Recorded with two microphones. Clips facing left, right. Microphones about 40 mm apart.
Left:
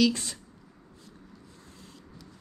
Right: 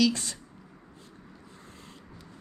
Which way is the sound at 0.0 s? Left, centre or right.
Centre.